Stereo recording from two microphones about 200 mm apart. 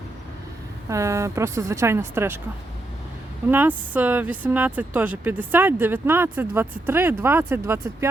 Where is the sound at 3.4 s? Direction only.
10° right (ahead or behind).